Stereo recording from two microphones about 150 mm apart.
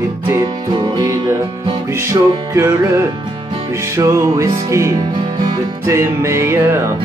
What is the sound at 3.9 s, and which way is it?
Music, 20° right (ahead or behind).